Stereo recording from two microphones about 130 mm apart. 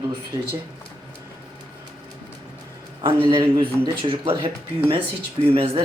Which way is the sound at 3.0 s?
45° right (ahead or behind).